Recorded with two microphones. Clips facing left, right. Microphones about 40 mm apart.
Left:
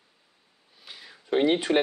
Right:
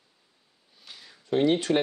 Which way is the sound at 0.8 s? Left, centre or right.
Centre.